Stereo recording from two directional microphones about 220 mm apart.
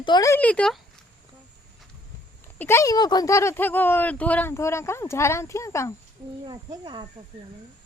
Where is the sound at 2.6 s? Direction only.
10° left (ahead or behind).